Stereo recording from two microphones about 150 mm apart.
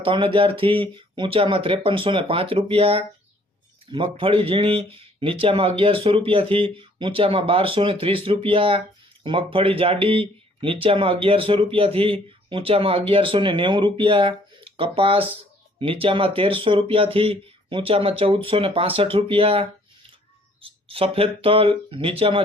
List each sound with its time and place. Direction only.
0.0 s speech: 35° right (ahead or behind)